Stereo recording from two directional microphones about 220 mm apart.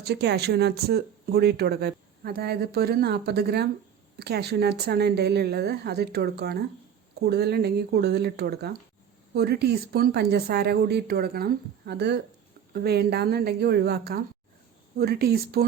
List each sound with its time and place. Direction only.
0.0 s speech: 50° right (ahead or behind)